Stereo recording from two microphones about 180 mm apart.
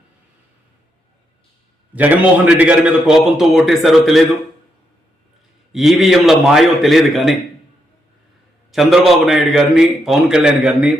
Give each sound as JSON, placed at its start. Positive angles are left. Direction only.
{"t": 2.0, "sound": "a man's voice", "side_deg": -10}
{"t": 5.7, "sound": "a man's voice", "side_deg": 0}
{"t": 8.7, "sound": "a man's voice", "side_deg": 0}